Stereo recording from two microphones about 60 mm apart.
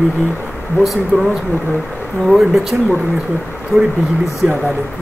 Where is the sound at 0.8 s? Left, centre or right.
Centre.